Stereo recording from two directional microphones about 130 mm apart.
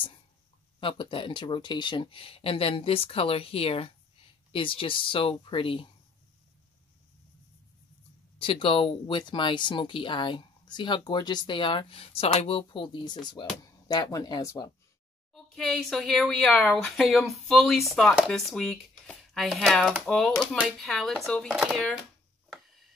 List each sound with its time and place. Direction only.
0.7 s speech: 40° left (ahead or behind)
8.4 s speech: 45° left (ahead or behind)
15.3 s speech: centre (ahead or behind)
22.5 s tick: centre (ahead or behind)